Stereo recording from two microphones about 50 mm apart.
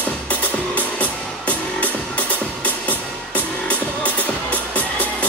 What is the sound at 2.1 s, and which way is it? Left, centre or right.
Music, left.